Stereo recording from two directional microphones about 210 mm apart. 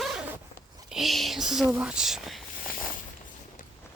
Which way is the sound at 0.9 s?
Centre (ahead or behind).